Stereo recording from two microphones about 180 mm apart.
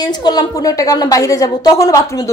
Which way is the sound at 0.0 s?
20° left (ahead or behind).